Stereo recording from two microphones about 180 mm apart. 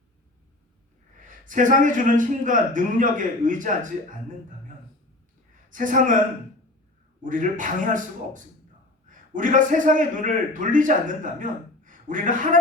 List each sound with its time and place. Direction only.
1.2 s a man's voice: 45° right (ahead or behind)
5.6 s speech: 45° right (ahead or behind)
7.3 s a man's voice: 45° right (ahead or behind)